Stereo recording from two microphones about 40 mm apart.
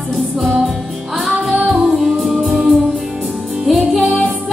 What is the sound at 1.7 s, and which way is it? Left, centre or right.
Music, centre.